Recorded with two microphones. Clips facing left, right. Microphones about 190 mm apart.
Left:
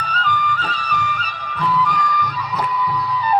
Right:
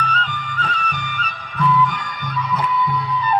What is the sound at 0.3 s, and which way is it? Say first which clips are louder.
Music: left 7 dB; 30° right (ahead or behind).